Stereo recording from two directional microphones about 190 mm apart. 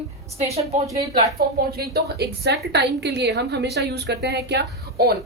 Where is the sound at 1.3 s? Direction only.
55° right (ahead or behind).